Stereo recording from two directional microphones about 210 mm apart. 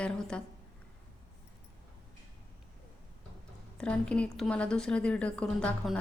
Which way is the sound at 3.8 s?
5° left (ahead or behind).